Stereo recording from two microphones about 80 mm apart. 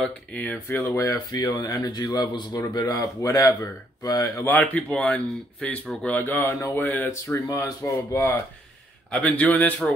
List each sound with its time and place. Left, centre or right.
0.0 s speech: centre
0.8 s speech: left
1.3 s speech: left
4.5 s a man's voice: centre
7.8 s speech: left
9.1 s speech: centre